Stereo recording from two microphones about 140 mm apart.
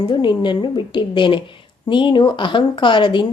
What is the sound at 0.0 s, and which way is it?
A woman's voice, 35° left (ahead or behind).